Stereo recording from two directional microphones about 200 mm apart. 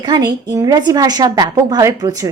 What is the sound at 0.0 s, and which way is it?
A woman's voice, 20° right (ahead or behind).